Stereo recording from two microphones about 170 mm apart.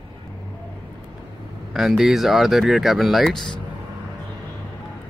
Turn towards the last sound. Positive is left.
turn(degrees=0)  # may be behind; listen again after turning